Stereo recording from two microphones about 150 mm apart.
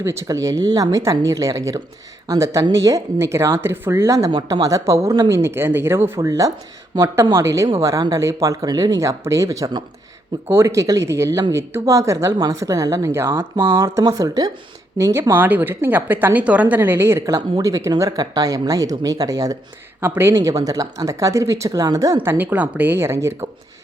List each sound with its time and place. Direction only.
0.0 s speech: 20° right (ahead or behind)
4.3 s a woman's voice: 30° right (ahead or behind); by 23.5 s 15° right (ahead or behind)